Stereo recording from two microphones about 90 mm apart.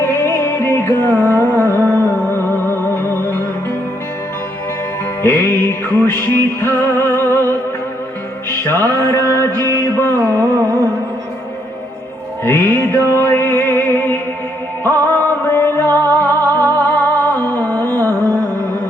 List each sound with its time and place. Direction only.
0.0 s music: 30° left (ahead or behind)
5.2 s music: 25° left (ahead or behind)
12.5 s music: 25° left (ahead or behind)